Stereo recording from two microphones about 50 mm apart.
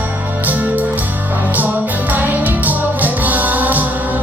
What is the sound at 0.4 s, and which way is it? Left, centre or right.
Music, right.